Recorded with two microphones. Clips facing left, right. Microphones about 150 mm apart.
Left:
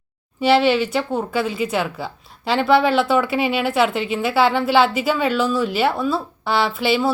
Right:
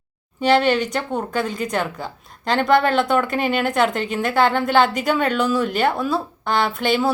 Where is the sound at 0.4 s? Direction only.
5° left (ahead or behind).